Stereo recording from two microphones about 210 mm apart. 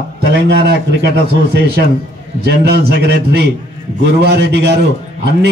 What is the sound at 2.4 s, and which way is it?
A man's voice, 50° right (ahead or behind).